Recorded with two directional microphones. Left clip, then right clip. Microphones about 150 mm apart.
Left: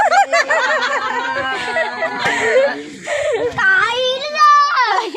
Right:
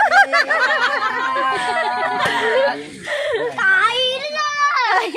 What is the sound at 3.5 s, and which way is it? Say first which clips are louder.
Baby cry: left 1 dB; 40° left (ahead or behind).